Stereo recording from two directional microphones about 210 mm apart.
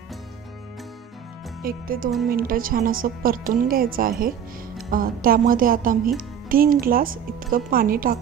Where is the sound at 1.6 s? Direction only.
45° right (ahead or behind).